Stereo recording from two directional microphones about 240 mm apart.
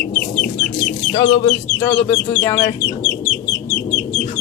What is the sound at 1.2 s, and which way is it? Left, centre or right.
Speech, centre.